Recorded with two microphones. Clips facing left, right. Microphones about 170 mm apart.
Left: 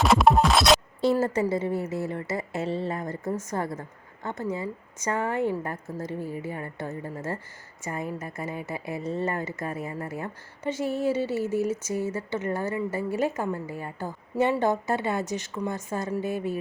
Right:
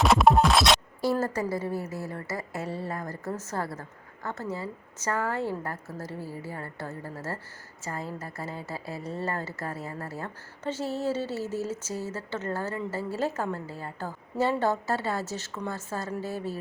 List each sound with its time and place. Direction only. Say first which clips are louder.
0.0 s music: left 1 dB; centre (ahead or behind)
1.2 s a woman's voice: left 4 dB; 20° left (ahead or behind)